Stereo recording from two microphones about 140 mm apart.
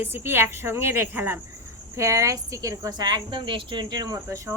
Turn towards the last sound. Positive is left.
turn(degrees=-20)  # may be behind; listen again after turning